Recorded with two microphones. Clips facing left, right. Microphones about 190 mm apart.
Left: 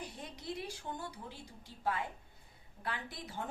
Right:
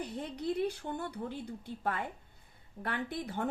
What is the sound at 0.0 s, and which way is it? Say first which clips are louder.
Speech: right 9 dB; 60° right (ahead or behind).